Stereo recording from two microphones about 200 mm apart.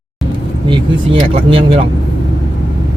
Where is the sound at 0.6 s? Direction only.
25° right (ahead or behind).